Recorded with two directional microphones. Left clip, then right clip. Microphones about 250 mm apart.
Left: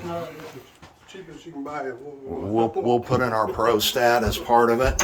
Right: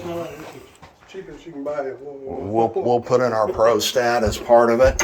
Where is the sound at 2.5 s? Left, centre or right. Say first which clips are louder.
Right 3 dB; left.